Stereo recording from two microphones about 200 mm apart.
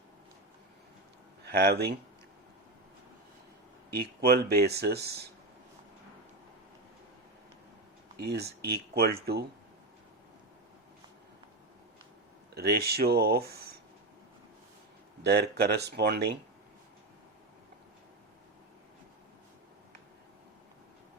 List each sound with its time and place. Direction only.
1.5 s speech: 50° right (ahead or behind)
3.9 s speech: 50° right (ahead or behind)
8.2 s speech: 55° right (ahead or behind)
12.5 s speech: 50° right (ahead or behind)
15.2 s speech: 55° right (ahead or behind)